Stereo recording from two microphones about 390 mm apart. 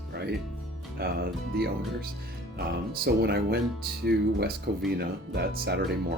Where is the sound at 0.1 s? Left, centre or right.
Right.